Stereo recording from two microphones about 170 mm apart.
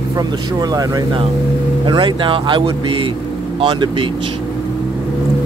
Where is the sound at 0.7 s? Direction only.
20° right (ahead or behind).